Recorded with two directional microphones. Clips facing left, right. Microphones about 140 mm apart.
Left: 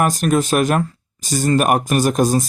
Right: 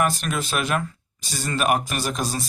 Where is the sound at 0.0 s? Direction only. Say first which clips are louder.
Left 7 dB; 45° left (ahead or behind).